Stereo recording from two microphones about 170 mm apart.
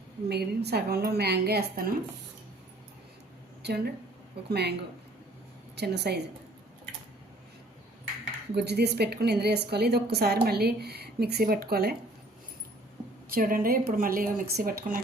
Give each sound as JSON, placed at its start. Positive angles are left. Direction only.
{"t": 0.3, "sound": "a woman's voice", "side_deg": -75}
{"t": 3.6, "sound": "a woman's voice", "side_deg": -75}
{"t": 8.5, "sound": "a woman's voice", "side_deg": -75}
{"t": 13.3, "sound": "speech", "side_deg": -55}